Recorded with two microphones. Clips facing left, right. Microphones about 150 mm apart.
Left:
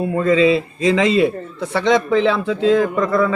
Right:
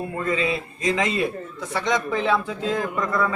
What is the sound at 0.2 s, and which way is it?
A man's voice, 90° left.